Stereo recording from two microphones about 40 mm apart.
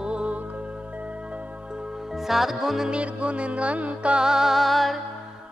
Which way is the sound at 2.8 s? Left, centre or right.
Right.